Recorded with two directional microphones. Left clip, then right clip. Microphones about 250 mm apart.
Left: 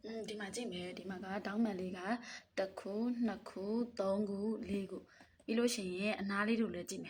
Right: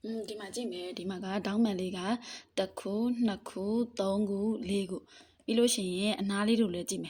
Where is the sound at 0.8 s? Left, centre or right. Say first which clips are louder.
Right 7 dB; right.